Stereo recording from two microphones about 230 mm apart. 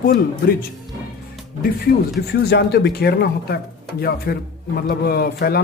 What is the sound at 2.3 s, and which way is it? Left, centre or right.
A man's voice, left.